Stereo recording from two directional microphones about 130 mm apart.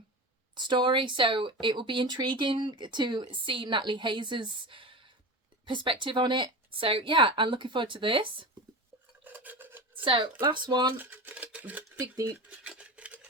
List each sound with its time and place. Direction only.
0.5 s speech: 35° right (ahead or behind)
9.2 s stir: 15° right (ahead or behind)
9.9 s a sound: 40° right (ahead or behind)
10.4 s speech: 35° right (ahead or behind)
10.9 s speech: 15° right (ahead or behind)
11.9 s speech: 25° right (ahead or behind)
12.5 s cutlery: 10° right (ahead or behind)